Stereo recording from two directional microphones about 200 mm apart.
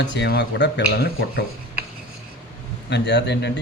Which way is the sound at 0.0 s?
60° left (ahead or behind).